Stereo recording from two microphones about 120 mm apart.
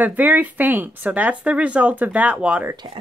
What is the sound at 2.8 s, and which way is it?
Speech, 50° right (ahead or behind).